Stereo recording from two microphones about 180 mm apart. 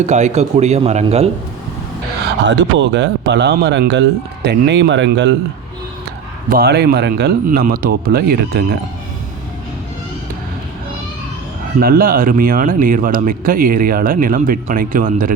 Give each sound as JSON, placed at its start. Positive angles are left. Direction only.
{"t": 0.0, "sound": "speech", "side_deg": -40}
{"t": 2.5, "sound": "speech", "side_deg": -85}
{"t": 6.5, "sound": "speech", "side_deg": -60}
{"t": 11.8, "sound": "speech", "side_deg": -55}